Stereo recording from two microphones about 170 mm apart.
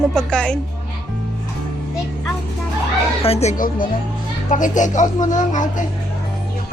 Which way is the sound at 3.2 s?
35° left (ahead or behind).